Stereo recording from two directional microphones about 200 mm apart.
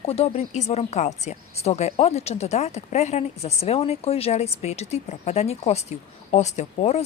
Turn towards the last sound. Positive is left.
turn(degrees=35)  # may be behind; listen again after turning